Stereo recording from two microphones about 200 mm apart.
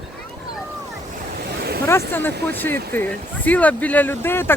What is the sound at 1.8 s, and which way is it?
Speech, 10° left (ahead or behind).